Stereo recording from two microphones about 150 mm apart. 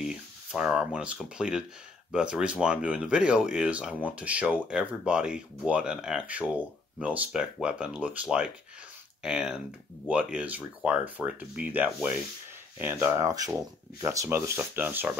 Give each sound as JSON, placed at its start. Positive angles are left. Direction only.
{"t": 0.0, "sound": "speech", "side_deg": -5}